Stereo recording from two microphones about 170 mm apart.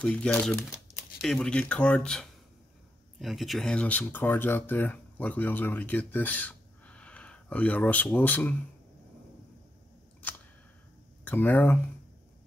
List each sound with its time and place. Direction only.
0.0 s speech: 5° left (ahead or behind)
11.2 s speech: 10° left (ahead or behind)